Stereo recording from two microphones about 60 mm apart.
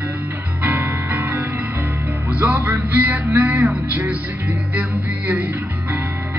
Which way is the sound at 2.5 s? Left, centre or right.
Right.